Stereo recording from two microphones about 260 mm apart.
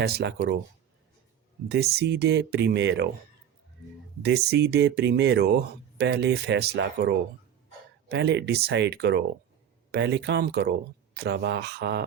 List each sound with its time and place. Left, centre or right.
0.0 s speech: right
1.6 s speech: right
4.2 s speech: right
8.1 s speech: right